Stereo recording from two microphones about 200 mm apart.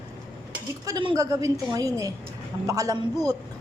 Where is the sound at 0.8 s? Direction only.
20° right (ahead or behind).